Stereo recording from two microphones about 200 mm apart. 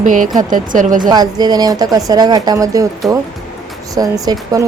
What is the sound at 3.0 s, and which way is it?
Speech, centre (ahead or behind).